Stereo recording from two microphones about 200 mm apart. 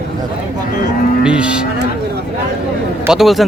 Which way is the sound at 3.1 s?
Centre (ahead or behind).